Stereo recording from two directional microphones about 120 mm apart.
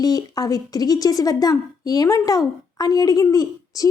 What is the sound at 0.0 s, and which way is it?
A woman's voice, 30° left (ahead or behind).